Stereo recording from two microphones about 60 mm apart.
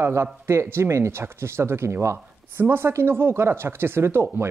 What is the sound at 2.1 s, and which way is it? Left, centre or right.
Speech, right.